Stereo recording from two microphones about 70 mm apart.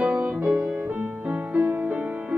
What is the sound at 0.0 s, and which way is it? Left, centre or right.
Music, right.